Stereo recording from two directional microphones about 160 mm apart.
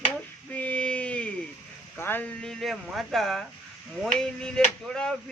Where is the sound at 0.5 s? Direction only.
10° left (ahead or behind).